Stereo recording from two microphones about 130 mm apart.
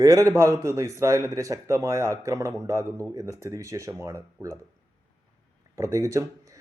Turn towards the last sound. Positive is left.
turn(degrees=-25)  # may be behind; listen again after turning